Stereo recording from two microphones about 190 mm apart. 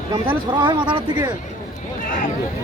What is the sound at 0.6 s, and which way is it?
Speech, 25° right (ahead or behind).